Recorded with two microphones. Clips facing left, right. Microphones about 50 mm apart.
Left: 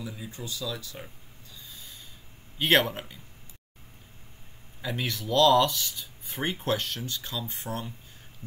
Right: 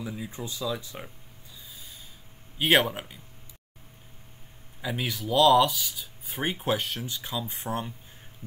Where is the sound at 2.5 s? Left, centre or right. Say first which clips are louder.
Right 1 dB; centre.